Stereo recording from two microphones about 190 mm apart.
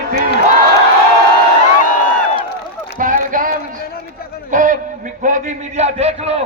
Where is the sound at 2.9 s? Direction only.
45° right (ahead or behind).